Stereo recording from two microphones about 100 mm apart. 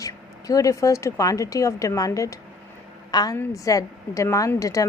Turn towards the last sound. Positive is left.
turn(degrees=35)  # may be behind; listen again after turning